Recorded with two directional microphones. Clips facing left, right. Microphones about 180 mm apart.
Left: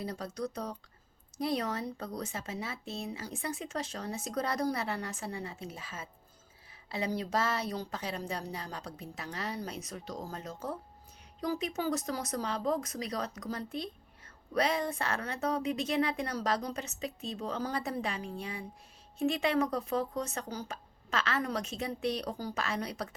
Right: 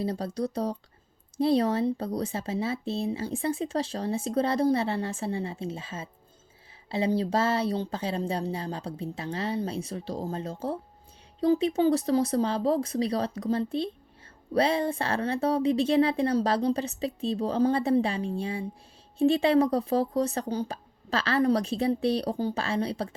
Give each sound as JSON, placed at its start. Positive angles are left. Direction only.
{"t": 0.0, "sound": "speech", "side_deg": -30}